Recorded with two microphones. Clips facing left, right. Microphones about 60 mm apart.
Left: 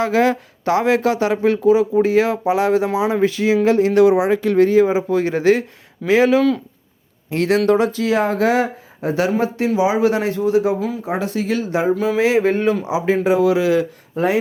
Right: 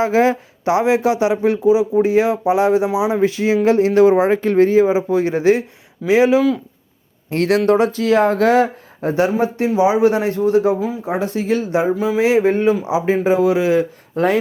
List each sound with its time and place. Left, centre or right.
0.0 s speech: right
2.0 s speech: right
3.2 s speech: right
4.2 s speech: right; by 6.4 s centre
7.3 s speech: right
10.8 s speech: right